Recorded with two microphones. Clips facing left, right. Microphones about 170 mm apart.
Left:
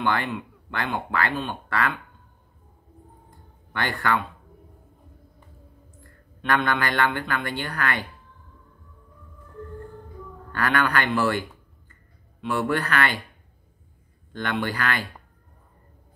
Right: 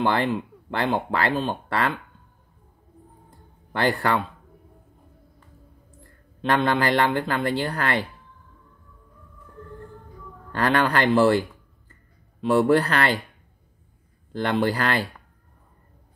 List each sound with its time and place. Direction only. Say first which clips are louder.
0.0 s speech: right 4 dB; 35° right (ahead or behind)
3.3 s a sound: even; 35° right (ahead or behind)
6.4 s speech: right 3 dB; 30° right (ahead or behind)
10.5 s speech: right 3 dB; 30° right (ahead or behind)
14.3 s speech: right 5 dB; 30° right (ahead or behind)